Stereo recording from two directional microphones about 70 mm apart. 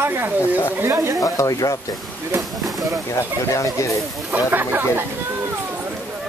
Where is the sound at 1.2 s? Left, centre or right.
Left.